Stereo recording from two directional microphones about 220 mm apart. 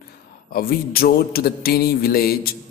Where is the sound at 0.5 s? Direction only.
45° left (ahead or behind).